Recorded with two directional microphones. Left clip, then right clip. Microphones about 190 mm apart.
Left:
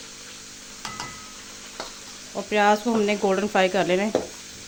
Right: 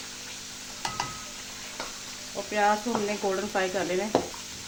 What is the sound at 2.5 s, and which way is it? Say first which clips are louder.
Speech: left 5 dB; 60° left (ahead or behind).